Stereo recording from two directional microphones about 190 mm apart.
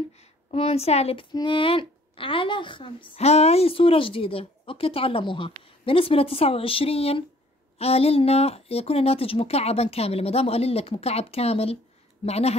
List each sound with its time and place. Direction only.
0.5 s speech: 30° left (ahead or behind)